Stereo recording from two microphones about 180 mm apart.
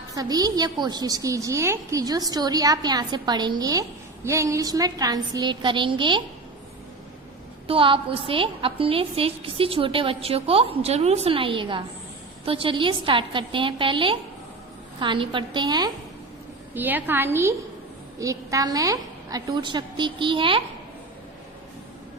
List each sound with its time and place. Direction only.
0.1 s a woman's voice: 20° right (ahead or behind)
7.7 s a woman's voice: 30° right (ahead or behind)
16.7 s a woman's voice: 10° right (ahead or behind); by 20.6 s 30° right (ahead or behind)